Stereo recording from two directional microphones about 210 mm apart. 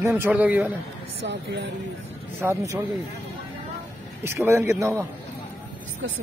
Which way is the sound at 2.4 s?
10° right (ahead or behind).